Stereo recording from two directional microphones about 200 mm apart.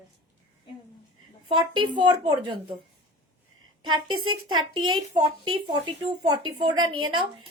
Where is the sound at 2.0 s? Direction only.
25° right (ahead or behind).